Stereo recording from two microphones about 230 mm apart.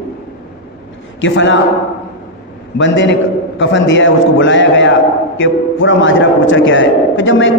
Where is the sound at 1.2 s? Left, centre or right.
Left.